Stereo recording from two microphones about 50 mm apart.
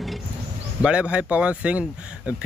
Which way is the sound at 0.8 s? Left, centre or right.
Right.